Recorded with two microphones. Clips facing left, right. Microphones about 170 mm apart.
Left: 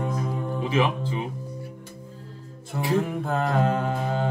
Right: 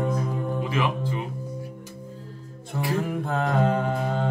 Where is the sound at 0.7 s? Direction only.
25° left (ahead or behind).